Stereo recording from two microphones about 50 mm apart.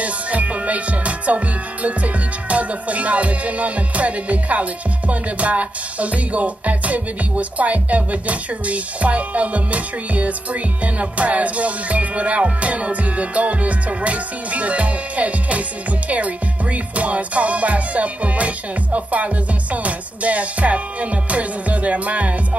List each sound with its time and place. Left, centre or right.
0.0 s music: right